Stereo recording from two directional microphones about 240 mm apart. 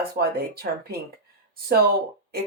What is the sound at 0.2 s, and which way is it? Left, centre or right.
Speech, right.